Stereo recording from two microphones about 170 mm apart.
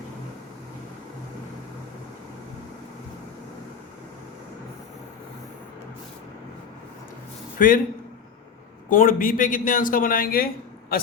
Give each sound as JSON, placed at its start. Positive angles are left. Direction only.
{"t": 7.6, "sound": "speech", "side_deg": 55}
{"t": 8.9, "sound": "a man's voice", "side_deg": 55}